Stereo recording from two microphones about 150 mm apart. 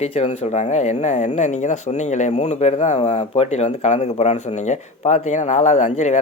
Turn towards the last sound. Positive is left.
turn(degrees=50)  # may be behind; listen again after turning